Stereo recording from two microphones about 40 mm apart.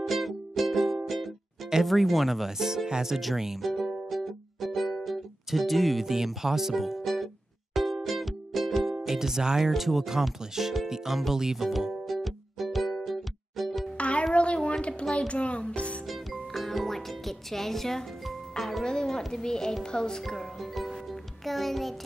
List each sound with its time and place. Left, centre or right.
0.0 s music: centre
1.9 s speech: centre
4.1 s music: centre
8.9 s music: centre
9.7 s speech: centre
12.1 s music: centre
13.9 s music: left
16.1 s music: centre
18.9 s speech: centre
20.5 s music: centre